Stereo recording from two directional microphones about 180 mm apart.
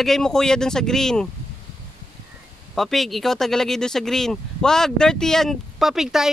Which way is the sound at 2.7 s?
Centre (ahead or behind).